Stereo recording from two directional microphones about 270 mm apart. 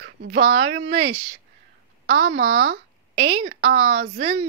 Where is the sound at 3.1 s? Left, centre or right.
Right.